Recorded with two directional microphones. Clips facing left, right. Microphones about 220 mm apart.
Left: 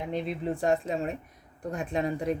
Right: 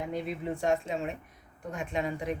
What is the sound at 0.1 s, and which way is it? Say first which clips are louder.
Speech: left 3 dB; 35° left (ahead or behind).